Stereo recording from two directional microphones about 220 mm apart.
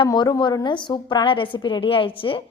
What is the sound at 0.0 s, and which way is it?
A woman's voice, 20° left (ahead or behind).